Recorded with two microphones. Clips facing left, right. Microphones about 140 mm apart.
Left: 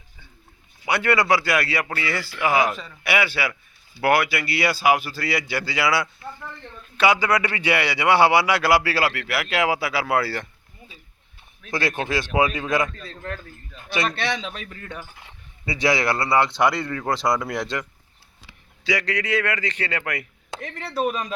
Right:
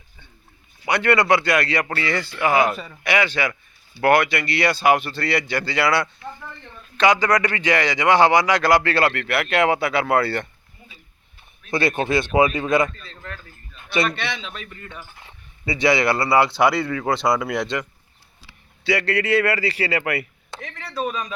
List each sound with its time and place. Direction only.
0.9 s speech: 5° left (ahead or behind)
11.7 s speech: centre (ahead or behind)
13.9 s speech: centre (ahead or behind)
14.7 s speech: 65° left (ahead or behind)
15.3 s speech: centre (ahead or behind)
18.9 s speech: centre (ahead or behind)